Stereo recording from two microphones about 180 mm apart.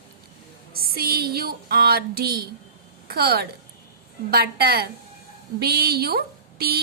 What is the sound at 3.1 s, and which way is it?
A woman's voice, 60° right (ahead or behind).